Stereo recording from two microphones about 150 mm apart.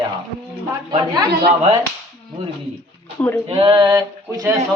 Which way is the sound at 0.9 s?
25° right (ahead or behind).